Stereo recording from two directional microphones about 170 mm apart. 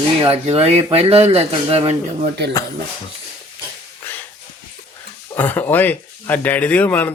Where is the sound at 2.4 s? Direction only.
80° right.